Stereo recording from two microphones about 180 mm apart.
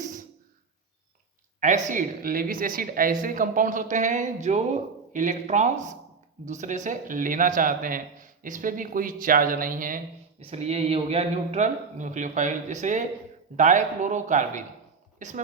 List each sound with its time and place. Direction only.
1.6 s a woman's voice: 45° right (ahead or behind)
10.4 s a man's voice: 35° right (ahead or behind)